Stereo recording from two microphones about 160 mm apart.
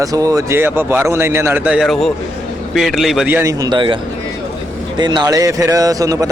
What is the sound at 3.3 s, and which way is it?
Speech, 15° right (ahead or behind).